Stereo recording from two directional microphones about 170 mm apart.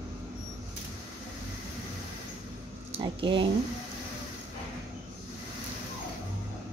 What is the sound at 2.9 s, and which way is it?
Speech, 30° right (ahead or behind).